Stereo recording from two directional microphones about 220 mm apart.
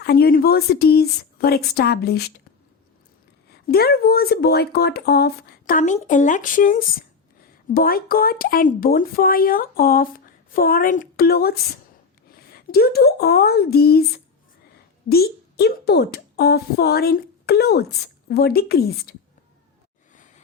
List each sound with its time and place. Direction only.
0.0 s speech: 45° left (ahead or behind)
3.5 s a woman's voice: 45° left (ahead or behind)
15.1 s speech: 45° left (ahead or behind)